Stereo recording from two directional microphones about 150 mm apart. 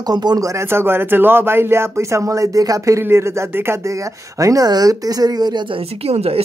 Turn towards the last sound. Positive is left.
turn(degrees=-40)  # may be behind; listen again after turning